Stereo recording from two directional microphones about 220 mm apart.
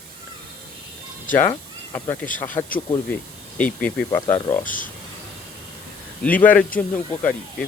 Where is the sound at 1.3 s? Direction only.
10° left (ahead or behind).